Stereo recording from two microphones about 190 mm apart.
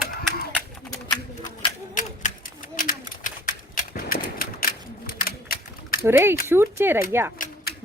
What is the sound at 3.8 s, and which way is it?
Typewriter, 45° left (ahead or behind).